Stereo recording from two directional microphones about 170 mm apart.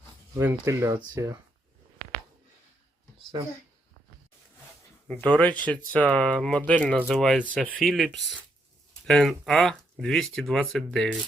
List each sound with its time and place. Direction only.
0.3 s speech: 15° right (ahead or behind)
5.2 s speech: 10° left (ahead or behind)